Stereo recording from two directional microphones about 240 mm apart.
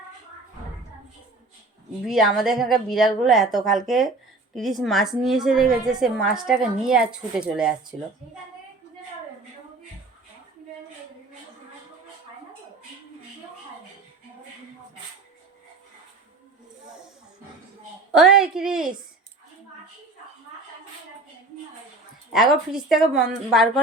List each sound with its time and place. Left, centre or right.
2.0 s a woman's voice: centre
18.1 s a sound: centre
22.3 s a woman's voice: centre